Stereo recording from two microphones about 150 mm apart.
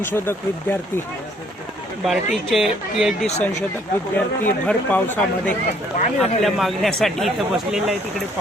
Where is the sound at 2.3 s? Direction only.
Centre (ahead or behind).